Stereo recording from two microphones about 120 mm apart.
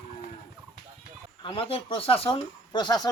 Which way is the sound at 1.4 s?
50° left (ahead or behind).